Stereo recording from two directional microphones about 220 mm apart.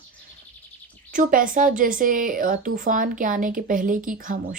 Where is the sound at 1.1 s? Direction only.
40° right (ahead or behind).